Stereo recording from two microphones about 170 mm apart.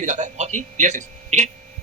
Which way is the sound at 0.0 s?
45° right (ahead or behind).